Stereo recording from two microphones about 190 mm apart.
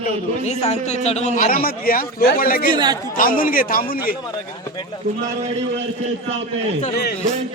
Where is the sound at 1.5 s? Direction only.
50° left (ahead or behind).